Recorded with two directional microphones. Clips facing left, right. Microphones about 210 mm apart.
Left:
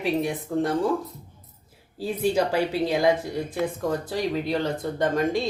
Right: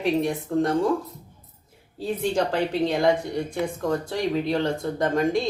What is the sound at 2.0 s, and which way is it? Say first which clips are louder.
Speech: left 1 dB; 5° left (ahead or behind).